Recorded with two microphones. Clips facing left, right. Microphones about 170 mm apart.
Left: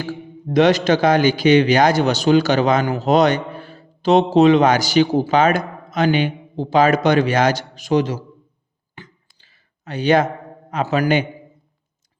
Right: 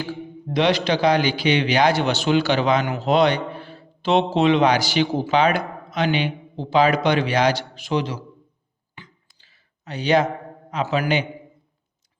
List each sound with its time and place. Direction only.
0.5 s a man's voice: 45° left (ahead or behind)
9.0 s a sound: 50° left (ahead or behind)
10.7 s a man's voice: 50° left (ahead or behind)